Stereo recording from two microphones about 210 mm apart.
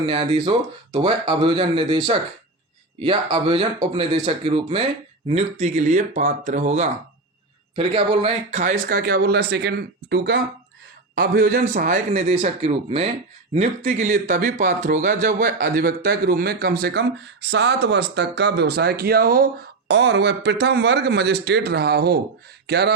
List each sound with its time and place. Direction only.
0.0 s speech: 25° right (ahead or behind); by 19.5 s 45° right (ahead or behind)
19.9 s speech: 55° right (ahead or behind)